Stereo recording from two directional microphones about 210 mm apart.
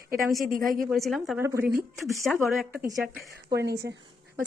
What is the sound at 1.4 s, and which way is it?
Speech, 15° right (ahead or behind).